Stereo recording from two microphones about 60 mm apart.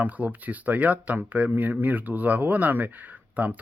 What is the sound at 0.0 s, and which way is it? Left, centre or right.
Speech, right.